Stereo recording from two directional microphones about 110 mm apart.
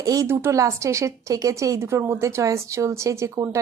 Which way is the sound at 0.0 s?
30° right (ahead or behind).